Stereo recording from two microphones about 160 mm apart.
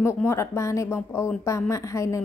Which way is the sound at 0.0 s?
15° left (ahead or behind).